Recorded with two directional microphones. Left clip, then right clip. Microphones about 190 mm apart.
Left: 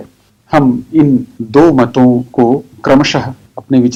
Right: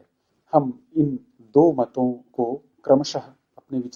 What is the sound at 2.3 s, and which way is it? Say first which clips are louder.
Speech: left 15 dB; 30° left (ahead or behind).